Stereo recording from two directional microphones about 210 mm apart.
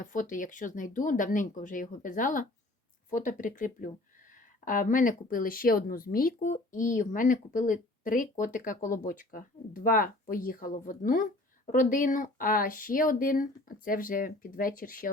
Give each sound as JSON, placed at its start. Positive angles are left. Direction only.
{"t": 0.0, "sound": "speech", "side_deg": 40}